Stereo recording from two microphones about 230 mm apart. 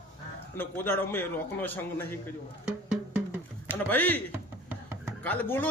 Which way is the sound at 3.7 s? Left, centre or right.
Centre.